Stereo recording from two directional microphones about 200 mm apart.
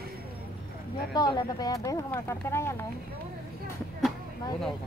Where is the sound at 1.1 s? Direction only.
20° left (ahead or behind).